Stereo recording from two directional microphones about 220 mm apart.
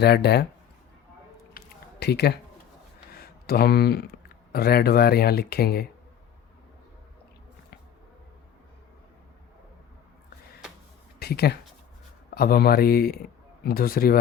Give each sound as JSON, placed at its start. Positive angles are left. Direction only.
{"t": 0.0, "sound": "speech", "side_deg": 50}
{"t": 1.5, "sound": "a sound", "side_deg": 50}
{"t": 3.1, "sound": "speech", "side_deg": 45}
{"t": 11.2, "sound": "speech", "side_deg": 45}